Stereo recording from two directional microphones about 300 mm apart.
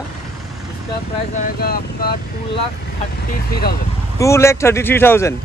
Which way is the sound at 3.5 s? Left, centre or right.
Left.